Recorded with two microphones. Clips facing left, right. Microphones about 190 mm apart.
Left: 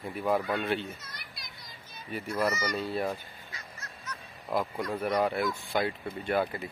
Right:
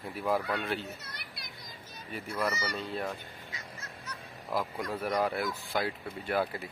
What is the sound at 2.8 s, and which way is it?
Speech, 10° left (ahead or behind).